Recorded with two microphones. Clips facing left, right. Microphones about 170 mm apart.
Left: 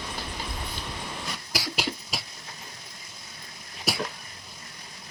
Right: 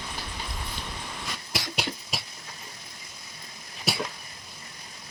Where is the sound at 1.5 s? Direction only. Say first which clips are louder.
Left 1 dB; centre (ahead or behind).